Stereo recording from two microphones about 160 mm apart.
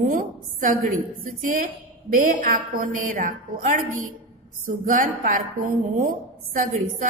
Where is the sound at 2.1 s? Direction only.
60° right (ahead or behind).